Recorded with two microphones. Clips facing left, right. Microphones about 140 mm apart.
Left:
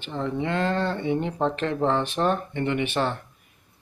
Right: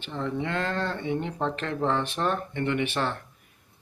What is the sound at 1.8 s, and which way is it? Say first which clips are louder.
Speech: left 2 dB; 25° left (ahead or behind).